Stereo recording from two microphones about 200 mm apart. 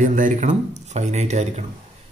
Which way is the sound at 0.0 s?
40° right (ahead or behind).